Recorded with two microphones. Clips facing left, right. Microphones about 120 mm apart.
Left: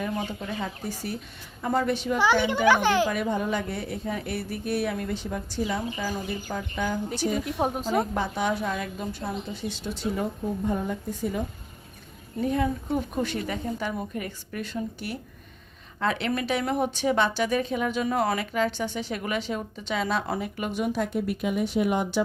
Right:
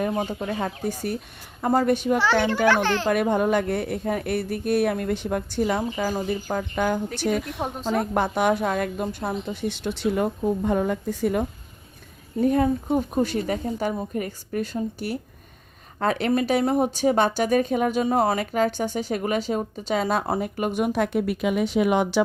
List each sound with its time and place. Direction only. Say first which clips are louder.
0.1 s speech: right 5 dB; 40° right (ahead or behind)
2.1 s a woman's voice: right 2 dB; 15° left (ahead or behind)
3.1 s speech: right 6 dB; 60° right (ahead or behind)
7.2 s speech: right 1 dB; 65° right (ahead or behind)
7.8 s speech: right 4 dB; 40° left (ahead or behind)
8.1 s speech: right 5 dB; 55° right (ahead or behind)
10.7 s a woman's voice: right 5 dB; 85° right
12.4 s speech: right 5 dB; 40° right (ahead or behind); by 22.2 s 90° right